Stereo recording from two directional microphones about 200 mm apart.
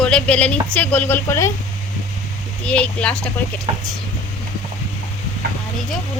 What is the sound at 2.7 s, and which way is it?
Speech, 5° left (ahead or behind).